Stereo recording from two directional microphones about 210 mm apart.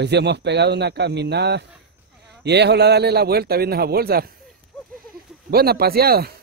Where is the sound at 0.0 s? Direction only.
55° right (ahead or behind).